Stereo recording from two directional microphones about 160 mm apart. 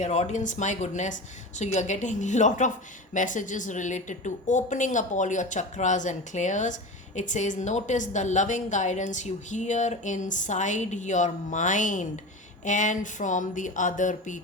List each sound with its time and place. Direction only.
0.0 s a woman's voice: 45° left (ahead or behind)